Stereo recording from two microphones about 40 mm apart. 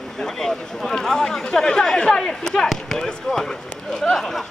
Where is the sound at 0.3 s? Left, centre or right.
Centre.